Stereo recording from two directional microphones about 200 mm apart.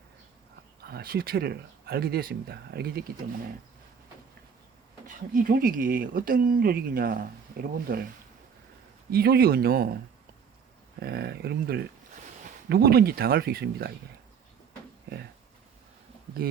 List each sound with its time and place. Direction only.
0.9 s speech: 50° right (ahead or behind)
5.0 s speech: 40° right (ahead or behind)
9.0 s speech: 50° right (ahead or behind)
11.0 s speech: 50° right (ahead or behind)